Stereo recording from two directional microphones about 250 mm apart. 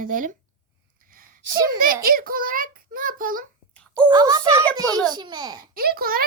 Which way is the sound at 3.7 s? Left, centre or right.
Centre.